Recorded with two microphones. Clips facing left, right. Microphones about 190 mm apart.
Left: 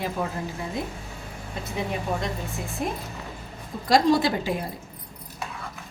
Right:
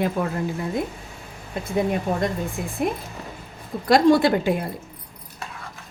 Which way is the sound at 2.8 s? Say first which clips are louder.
Right 5 dB; 60° right (ahead or behind).